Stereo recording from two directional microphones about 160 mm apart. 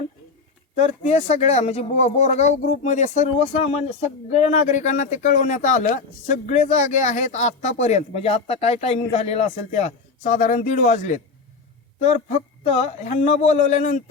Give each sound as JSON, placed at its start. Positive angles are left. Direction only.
{"t": 0.8, "sound": "speech", "side_deg": 45}